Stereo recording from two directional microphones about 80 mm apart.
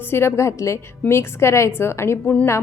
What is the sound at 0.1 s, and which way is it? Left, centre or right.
Speech, left.